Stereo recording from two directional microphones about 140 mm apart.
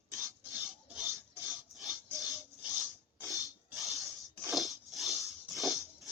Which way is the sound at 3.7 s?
Centre (ahead or behind).